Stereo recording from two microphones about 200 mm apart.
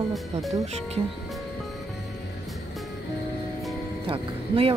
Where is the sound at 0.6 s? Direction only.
35° right (ahead or behind).